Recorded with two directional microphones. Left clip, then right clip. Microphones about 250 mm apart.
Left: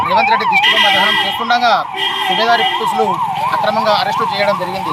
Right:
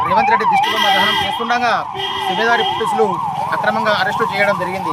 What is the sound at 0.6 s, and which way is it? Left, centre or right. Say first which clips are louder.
Speech: left 3 dB; right.